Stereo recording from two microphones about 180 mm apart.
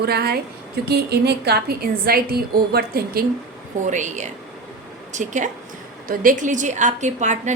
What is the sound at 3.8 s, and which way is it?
A woman's voice, 40° right (ahead or behind).